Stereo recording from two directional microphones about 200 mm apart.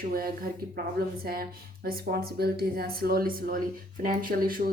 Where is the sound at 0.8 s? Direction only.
50° right (ahead or behind).